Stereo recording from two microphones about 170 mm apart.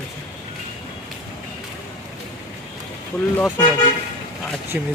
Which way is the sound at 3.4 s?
10° left (ahead or behind).